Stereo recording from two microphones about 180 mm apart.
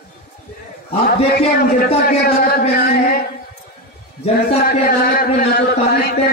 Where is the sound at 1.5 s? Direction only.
55° left (ahead or behind).